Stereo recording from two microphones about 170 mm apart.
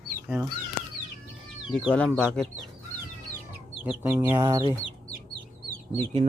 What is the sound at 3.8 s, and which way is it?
Speech, 10° right (ahead or behind).